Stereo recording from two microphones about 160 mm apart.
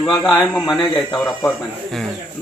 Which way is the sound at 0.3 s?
Centre (ahead or behind).